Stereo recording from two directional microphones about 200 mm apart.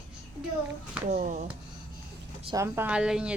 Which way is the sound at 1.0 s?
35° right (ahead or behind).